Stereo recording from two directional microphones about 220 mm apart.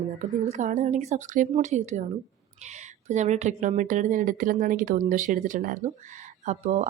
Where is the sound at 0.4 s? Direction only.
30° right (ahead or behind).